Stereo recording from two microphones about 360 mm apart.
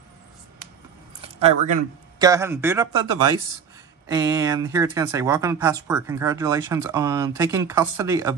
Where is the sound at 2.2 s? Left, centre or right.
Centre.